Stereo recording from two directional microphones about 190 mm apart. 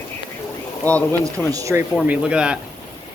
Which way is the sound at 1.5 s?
15° right (ahead or behind).